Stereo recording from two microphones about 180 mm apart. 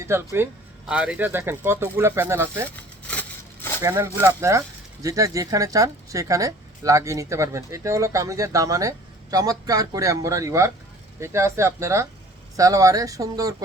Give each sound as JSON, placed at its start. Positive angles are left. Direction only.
{"t": 0.0, "sound": "a woman's voice", "side_deg": -15}
{"t": 3.1, "sound": "a sound", "side_deg": 10}
{"t": 3.8, "sound": "a woman's voice", "side_deg": -15}